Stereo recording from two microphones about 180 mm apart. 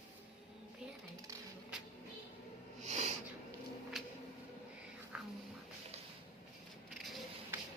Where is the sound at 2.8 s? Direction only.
40° right (ahead or behind).